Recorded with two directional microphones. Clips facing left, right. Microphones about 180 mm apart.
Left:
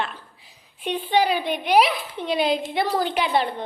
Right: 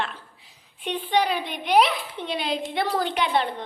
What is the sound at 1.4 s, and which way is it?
A woman's voice, 5° left (ahead or behind).